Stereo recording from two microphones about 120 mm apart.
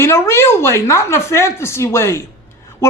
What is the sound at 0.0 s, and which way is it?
Speech, 20° left (ahead or behind).